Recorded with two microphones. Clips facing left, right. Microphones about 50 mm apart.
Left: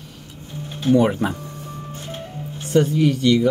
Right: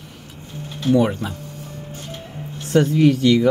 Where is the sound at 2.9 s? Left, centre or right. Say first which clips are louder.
Right 2 dB; right.